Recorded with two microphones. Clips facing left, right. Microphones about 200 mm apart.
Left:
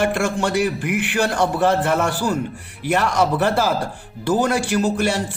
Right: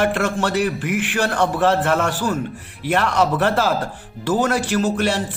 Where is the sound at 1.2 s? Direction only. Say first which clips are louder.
Even; 10° left (ahead or behind).